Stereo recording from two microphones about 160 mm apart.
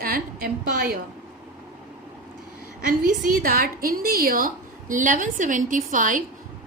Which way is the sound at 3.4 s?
65° right (ahead or behind).